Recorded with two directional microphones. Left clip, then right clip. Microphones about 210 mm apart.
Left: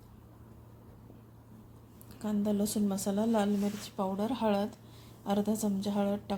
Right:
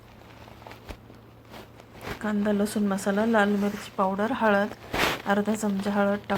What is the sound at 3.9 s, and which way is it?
Speech, 20° right (ahead or behind).